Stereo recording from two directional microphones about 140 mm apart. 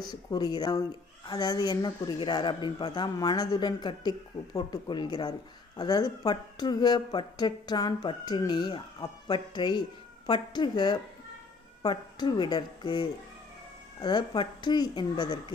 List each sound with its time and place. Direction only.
0.0 s speech: 30° left (ahead or behind)